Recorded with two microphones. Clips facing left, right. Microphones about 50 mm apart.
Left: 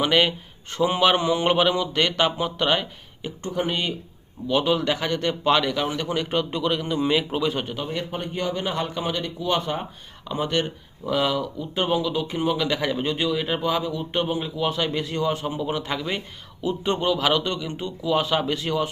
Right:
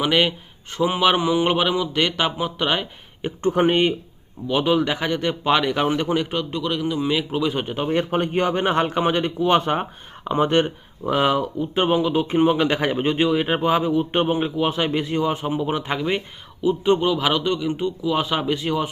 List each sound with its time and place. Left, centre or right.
0.0 s speech: centre
3.2 s speech: right
4.4 s speech: centre
5.7 s a man's voice: right
6.3 s a man's voice: centre
7.5 s speech: centre
7.9 s a man's voice: right; by 18.9 s centre